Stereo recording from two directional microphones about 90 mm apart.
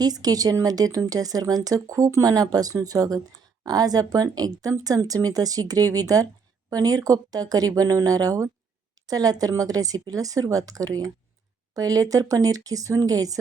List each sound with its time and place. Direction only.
0.0 s speech: 45° right (ahead or behind)